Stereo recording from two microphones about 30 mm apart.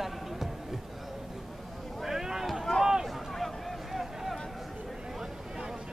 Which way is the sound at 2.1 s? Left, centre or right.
Centre.